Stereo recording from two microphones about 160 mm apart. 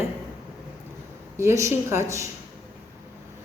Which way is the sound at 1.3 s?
20° right (ahead or behind).